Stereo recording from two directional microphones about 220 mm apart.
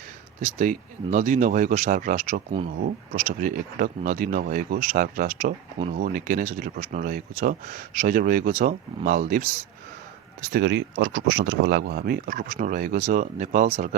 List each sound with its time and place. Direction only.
0.4 s speech: 35° right (ahead or behind)
10.5 s speech: 55° right (ahead or behind); by 13.9 s 35° right (ahead or behind)